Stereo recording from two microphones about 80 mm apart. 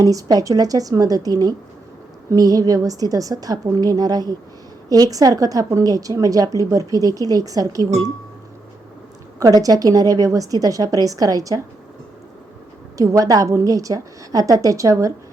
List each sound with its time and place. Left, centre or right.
0.0 s a woman's voice: right
9.4 s a woman's voice: right
13.0 s a woman's voice: right